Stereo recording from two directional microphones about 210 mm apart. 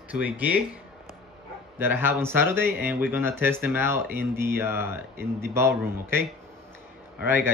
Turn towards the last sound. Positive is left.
turn(degrees=-10)  # may be behind; listen again after turning